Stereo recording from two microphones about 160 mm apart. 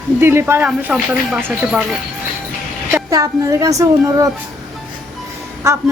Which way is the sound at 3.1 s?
20° right (ahead or behind).